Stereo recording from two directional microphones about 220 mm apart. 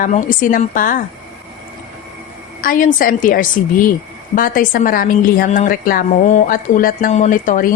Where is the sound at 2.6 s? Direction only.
40° left (ahead or behind).